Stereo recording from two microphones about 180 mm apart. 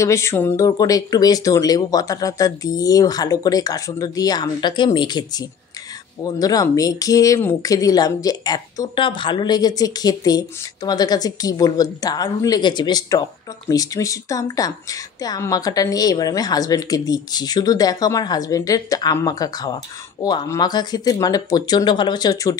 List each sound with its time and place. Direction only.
0.0 s a woman's voice: 15° left (ahead or behind)